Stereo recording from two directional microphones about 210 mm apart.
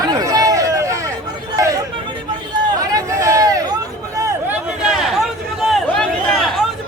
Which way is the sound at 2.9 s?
15° right (ahead or behind).